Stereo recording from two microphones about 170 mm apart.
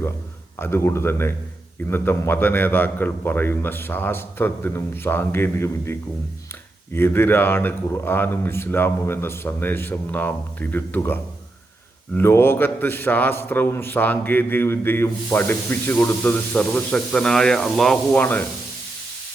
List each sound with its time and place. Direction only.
0.6 s a man's voice: 15° left (ahead or behind)